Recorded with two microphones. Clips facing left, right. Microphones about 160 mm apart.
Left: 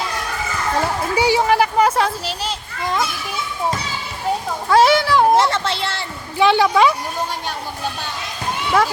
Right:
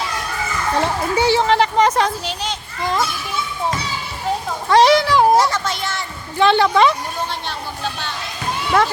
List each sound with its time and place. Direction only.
0.8 s speech: 10° left (ahead or behind)
2.8 s children playing: centre (ahead or behind)
4.7 s a sound: 5° left (ahead or behind)
5.4 s children playing: 25° left (ahead or behind)
6.3 s a woman's voice: 10° left (ahead or behind)